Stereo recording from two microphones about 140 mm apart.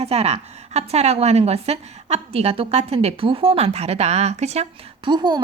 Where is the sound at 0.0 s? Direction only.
50° right (ahead or behind).